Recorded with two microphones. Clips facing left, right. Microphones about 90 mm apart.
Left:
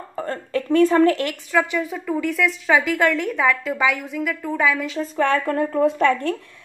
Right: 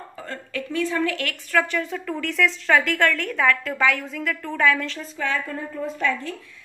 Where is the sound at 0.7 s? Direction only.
45° left (ahead or behind).